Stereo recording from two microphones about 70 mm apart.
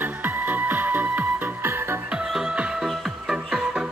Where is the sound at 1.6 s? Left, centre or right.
Right.